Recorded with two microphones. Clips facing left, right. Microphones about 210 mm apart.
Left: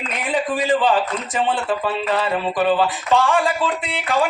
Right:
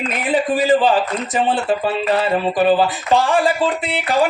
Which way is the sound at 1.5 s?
35° right (ahead or behind).